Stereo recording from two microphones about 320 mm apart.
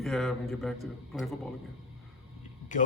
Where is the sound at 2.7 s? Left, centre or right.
Left.